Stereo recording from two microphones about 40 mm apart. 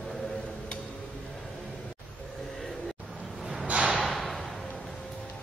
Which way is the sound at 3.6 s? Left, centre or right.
Centre.